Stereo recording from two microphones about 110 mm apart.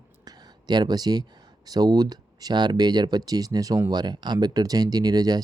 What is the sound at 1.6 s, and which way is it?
Speech, 35° right (ahead or behind).